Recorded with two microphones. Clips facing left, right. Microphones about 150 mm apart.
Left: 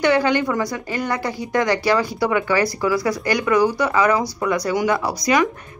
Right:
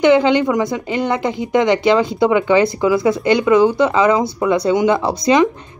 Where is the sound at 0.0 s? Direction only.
20° right (ahead or behind).